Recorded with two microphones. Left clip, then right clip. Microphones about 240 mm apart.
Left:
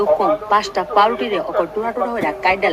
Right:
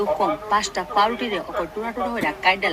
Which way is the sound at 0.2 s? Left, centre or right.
Centre.